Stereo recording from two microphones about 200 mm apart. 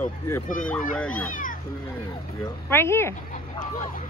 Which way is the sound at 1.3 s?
40° left (ahead or behind).